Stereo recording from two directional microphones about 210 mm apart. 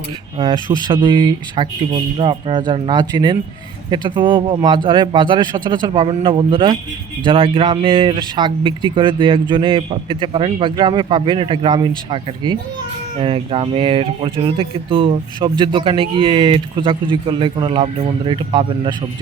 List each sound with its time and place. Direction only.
0.3 s speech: 20° right (ahead or behind)